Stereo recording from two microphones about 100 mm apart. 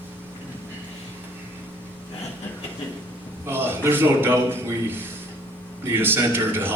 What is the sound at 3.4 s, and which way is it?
A man's voice, 20° right (ahead or behind).